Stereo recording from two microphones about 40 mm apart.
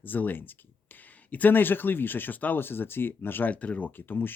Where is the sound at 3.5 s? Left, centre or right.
Left.